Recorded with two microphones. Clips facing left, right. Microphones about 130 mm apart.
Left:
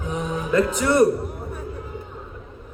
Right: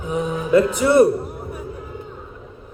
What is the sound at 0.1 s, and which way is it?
Music, 10° right (ahead or behind).